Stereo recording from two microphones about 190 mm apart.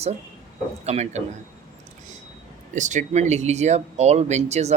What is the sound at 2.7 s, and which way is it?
Speech, 40° right (ahead or behind).